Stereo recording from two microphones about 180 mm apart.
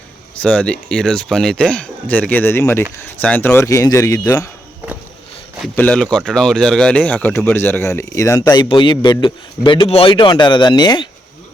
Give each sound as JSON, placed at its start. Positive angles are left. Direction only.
{"t": 0.3, "sound": "speech", "side_deg": 5}
{"t": 5.6, "sound": "a man's voice", "side_deg": 5}